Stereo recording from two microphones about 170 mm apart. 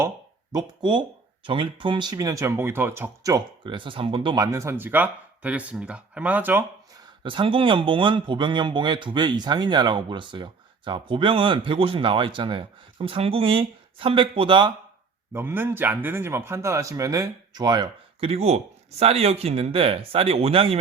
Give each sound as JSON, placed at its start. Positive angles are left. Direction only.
{"t": 0.5, "sound": "a man's voice", "side_deg": -25}
{"t": 7.2, "sound": "a man's voice", "side_deg": -30}
{"t": 15.3, "sound": "speech", "side_deg": -15}
{"t": 18.3, "sound": "speech", "side_deg": -40}